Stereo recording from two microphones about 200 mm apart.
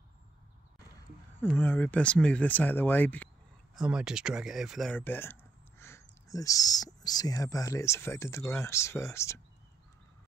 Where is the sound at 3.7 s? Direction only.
5° right (ahead or behind); by 9.4 s 15° left (ahead or behind).